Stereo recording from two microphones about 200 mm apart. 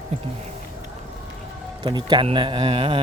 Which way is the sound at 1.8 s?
20° right (ahead or behind).